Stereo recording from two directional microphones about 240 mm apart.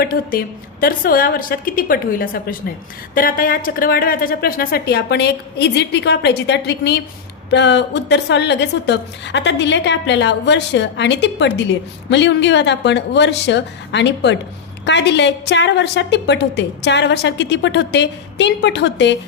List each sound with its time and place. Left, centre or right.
0.0 s a woman's voice: left